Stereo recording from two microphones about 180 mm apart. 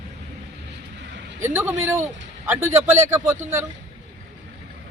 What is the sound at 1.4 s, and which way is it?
Speech, 10° right (ahead or behind).